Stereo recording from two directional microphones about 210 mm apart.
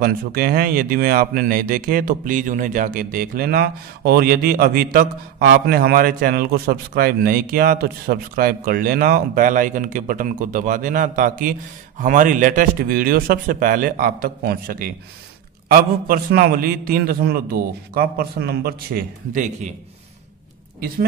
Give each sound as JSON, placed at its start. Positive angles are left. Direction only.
{"t": 0.0, "sound": "speech", "side_deg": -45}